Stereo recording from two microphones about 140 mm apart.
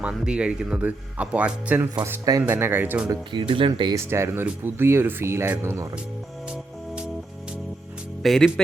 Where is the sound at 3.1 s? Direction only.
35° right (ahead or behind).